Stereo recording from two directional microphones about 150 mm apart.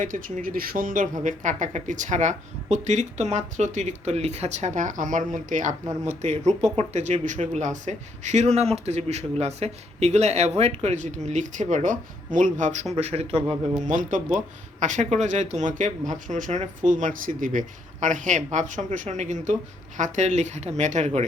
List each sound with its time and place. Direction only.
0.0 s speech: 60° right (ahead or behind); by 13.6 s 45° right (ahead or behind)
13.8 s speech: 55° right (ahead or behind)